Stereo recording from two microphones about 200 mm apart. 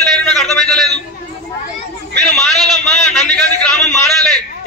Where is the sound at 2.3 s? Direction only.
Centre (ahead or behind).